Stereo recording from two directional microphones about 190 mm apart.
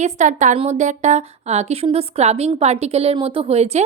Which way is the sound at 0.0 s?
40° right (ahead or behind).